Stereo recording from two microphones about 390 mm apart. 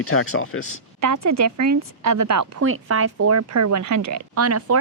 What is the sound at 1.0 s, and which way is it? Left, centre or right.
A woman's voice, right.